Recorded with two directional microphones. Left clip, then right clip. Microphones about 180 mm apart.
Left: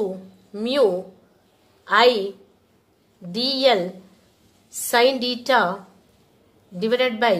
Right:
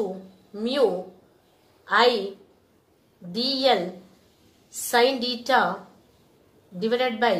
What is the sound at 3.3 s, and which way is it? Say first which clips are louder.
A woman's voice: left 3 dB; 40° left (ahead or behind).